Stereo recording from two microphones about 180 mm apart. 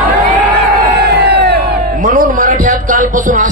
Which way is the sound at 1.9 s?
50° right (ahead or behind).